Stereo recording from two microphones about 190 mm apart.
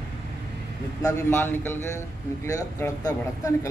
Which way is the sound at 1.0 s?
10° left (ahead or behind).